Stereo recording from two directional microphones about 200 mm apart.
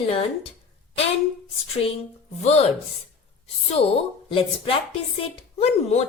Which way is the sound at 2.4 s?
35° left (ahead or behind).